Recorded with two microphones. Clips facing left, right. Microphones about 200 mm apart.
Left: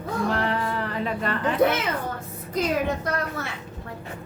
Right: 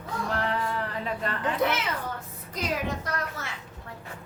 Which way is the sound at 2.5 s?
55° left (ahead or behind).